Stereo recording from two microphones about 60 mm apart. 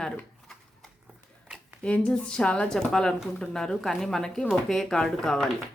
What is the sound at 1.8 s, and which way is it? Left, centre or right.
A woman's voice, centre.